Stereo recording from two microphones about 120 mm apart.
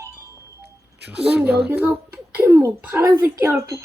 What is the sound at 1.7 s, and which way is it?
A child's voice, 15° right (ahead or behind).